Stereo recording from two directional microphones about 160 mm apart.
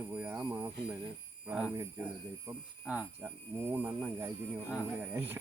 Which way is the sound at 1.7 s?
15° right (ahead or behind).